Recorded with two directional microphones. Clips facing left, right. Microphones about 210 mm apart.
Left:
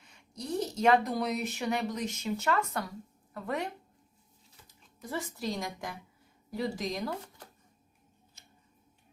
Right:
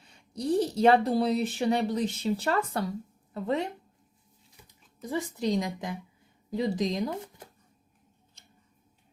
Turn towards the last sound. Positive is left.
turn(degrees=-20)  # may be behind; listen again after turning